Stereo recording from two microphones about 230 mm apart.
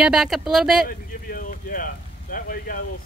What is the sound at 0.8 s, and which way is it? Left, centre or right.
Speech, left.